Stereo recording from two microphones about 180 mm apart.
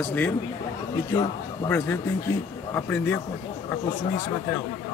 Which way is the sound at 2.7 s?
10° left (ahead or behind).